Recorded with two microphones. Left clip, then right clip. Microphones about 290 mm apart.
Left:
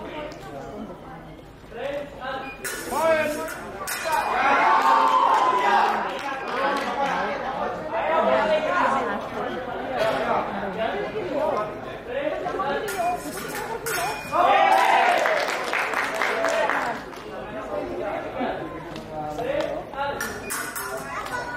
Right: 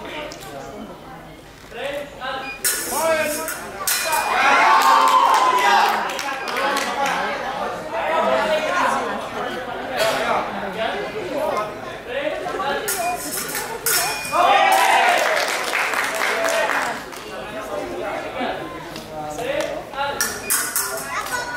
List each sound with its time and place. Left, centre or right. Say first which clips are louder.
1.8 s chink: right 3 dB; centre
4.0 s a sound: right 3 dB; centre
19.4 s music: right 3 dB; centre